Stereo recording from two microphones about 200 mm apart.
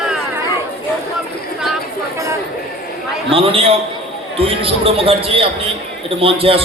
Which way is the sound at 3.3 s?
25° right (ahead or behind).